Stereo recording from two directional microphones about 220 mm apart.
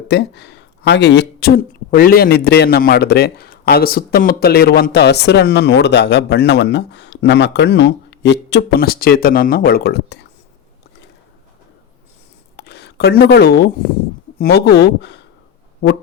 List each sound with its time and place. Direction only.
0.1 s speech: 50° left (ahead or behind)
12.5 s a sound: 50° left (ahead or behind)
14.3 s speech: 45° left (ahead or behind)